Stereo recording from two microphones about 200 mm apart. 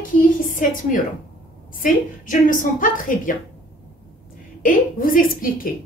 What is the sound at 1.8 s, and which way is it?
A woman's voice, 45° left (ahead or behind).